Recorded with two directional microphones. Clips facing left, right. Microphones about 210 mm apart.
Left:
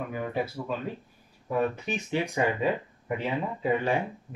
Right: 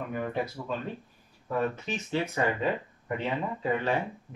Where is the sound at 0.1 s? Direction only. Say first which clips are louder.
Right 1 dB; 5° left (ahead or behind).